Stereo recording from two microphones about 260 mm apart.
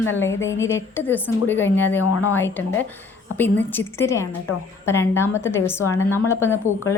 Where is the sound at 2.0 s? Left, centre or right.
Centre.